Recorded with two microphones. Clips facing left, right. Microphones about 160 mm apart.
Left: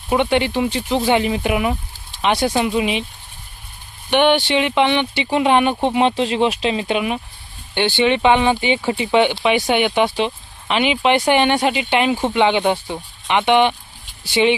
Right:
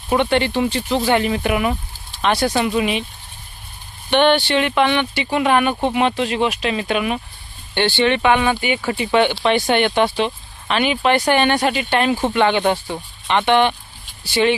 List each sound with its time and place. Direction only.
0.1 s speech: 15° left (ahead or behind)
4.1 s speech: 15° left (ahead or behind)